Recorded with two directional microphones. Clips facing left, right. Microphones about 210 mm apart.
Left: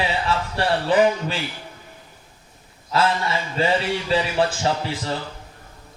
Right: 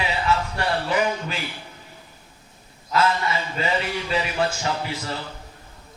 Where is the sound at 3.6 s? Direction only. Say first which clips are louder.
Left 6 dB; 30° left (ahead or behind).